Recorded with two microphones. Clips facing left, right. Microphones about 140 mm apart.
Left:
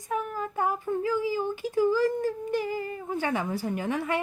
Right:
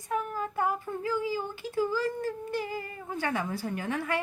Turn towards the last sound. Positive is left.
turn(degrees=20)  # may be behind; listen again after turning